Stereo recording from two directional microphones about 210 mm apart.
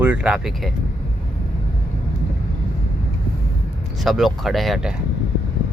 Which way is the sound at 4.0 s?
Centre (ahead or behind).